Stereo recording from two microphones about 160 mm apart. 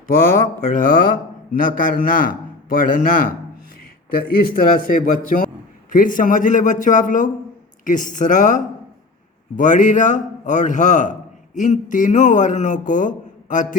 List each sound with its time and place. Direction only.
0.1 s a man's voice: 60° left (ahead or behind)